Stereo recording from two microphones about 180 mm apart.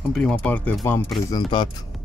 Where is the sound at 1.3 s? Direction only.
25° left (ahead or behind).